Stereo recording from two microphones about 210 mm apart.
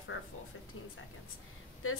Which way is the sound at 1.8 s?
80° left.